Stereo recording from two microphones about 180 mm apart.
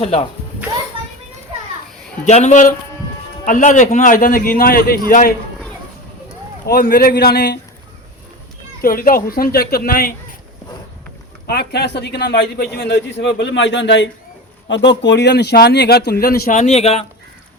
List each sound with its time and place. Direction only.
2.2 s a man's voice: 40° left (ahead or behind)
6.7 s speech: 55° left (ahead or behind)
8.8 s a man's voice: 55° left (ahead or behind)
11.4 s a man's voice: 65° left (ahead or behind); by 17.1 s 35° left (ahead or behind)